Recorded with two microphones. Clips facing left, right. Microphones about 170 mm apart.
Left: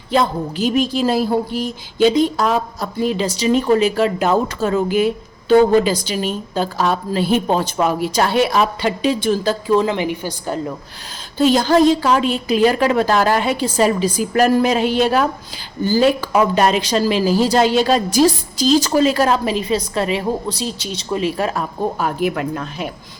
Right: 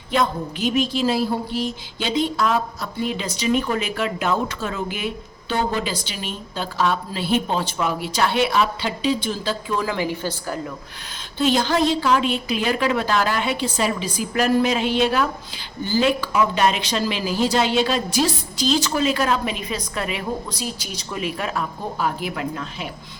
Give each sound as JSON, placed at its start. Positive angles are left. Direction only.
{"t": 0.1, "sound": "a woman's voice", "side_deg": 35}
{"t": 9.7, "sound": "a woman's voice", "side_deg": 20}
{"t": 11.3, "sound": "a woman's voice", "side_deg": 40}